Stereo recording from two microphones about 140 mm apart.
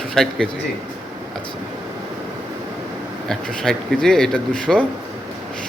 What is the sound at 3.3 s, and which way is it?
Speech, 5° left (ahead or behind).